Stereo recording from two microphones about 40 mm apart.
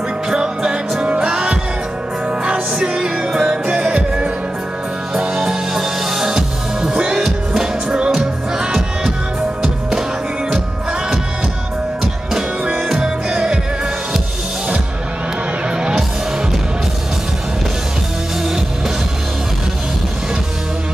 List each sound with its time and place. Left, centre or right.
0.3 s music: centre
1.0 s music: right
1.3 s music: centre
5.4 s music: centre
9.6 s music: centre
13.0 s music: right